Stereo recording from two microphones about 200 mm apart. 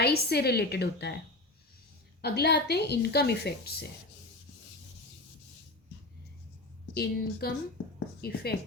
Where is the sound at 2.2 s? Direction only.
55° left (ahead or behind).